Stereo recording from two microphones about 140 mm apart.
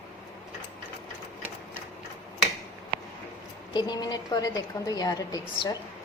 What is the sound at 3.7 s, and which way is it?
A woman's voice, 30° left (ahead or behind).